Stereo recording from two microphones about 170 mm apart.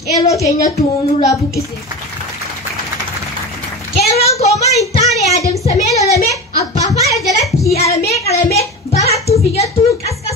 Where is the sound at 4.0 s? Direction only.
40° left (ahead or behind).